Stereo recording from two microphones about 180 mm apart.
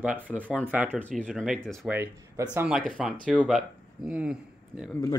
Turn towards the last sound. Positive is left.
turn(degrees=-5)  # may be behind; listen again after turning